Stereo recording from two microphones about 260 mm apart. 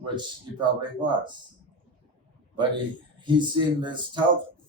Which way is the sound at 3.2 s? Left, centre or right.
Centre.